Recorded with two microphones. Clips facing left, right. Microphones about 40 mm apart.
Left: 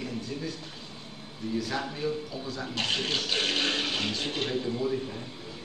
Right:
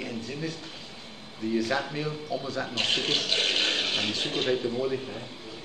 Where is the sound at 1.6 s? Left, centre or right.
Right.